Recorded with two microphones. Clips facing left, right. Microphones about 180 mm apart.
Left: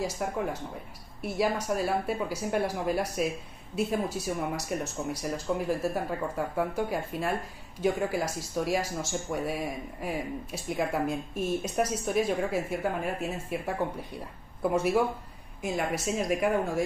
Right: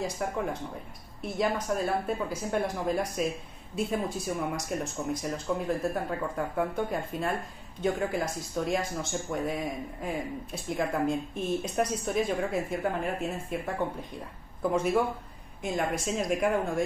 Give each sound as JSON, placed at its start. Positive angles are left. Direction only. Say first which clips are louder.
{"t": 0.0, "sound": "speech", "louder": "even", "side_deg": 5}